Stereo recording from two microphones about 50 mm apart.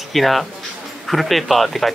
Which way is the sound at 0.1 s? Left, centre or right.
Centre.